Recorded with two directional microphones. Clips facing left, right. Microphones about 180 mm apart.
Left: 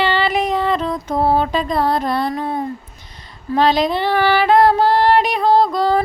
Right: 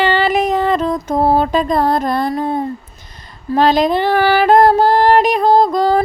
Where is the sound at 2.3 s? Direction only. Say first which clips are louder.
Right 4 dB; 35° right (ahead or behind).